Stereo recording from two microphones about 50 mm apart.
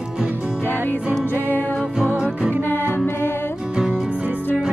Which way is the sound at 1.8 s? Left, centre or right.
Centre.